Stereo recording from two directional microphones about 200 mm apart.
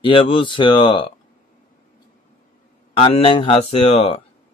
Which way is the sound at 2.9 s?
30° left (ahead or behind).